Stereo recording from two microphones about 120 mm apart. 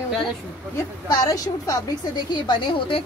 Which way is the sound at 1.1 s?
30° left (ahead or behind).